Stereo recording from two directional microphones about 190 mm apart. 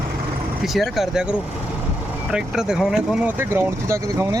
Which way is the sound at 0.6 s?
Centre (ahead or behind).